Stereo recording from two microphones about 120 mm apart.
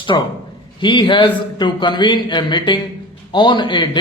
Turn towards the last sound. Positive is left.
turn(degrees=40)  # may be behind; listen again after turning